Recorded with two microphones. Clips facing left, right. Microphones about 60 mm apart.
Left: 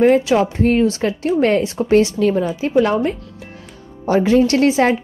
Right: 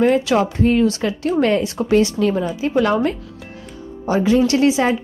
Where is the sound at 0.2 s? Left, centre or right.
Left.